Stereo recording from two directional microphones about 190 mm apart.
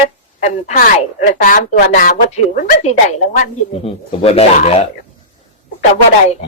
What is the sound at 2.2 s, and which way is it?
Speech, 35° left (ahead or behind).